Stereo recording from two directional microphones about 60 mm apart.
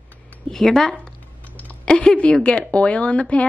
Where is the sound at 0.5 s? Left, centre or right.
Centre.